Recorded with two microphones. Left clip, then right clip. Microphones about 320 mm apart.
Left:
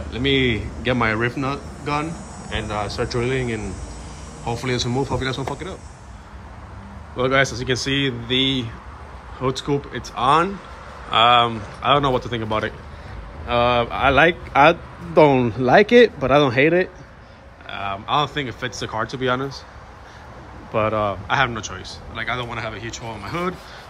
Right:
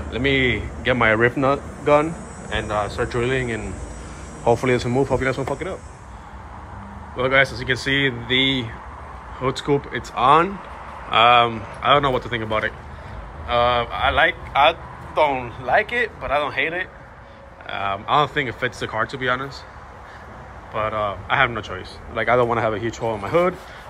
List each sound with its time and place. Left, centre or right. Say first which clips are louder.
0.1 s speech: even; centre
7.2 s speech: right 1 dB; centre
17.6 s speech: right 2 dB; centre
20.7 s a man's voice: left 3 dB; left; by 23.5 s centre